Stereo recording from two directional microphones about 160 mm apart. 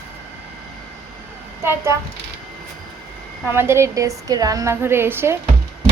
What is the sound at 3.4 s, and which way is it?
Speech, 15° right (ahead or behind).